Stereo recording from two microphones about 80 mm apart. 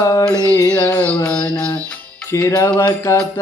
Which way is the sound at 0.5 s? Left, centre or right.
Left.